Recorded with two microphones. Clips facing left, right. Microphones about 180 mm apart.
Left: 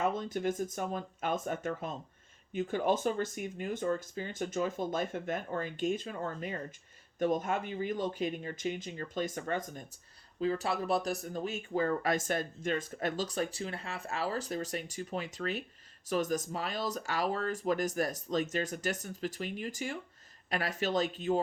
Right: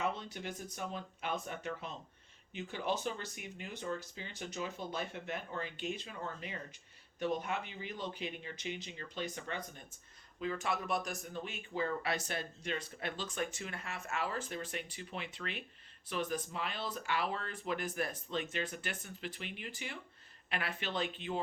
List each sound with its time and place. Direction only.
0.0 s speech: 45° left (ahead or behind)
10.4 s speech: 35° left (ahead or behind)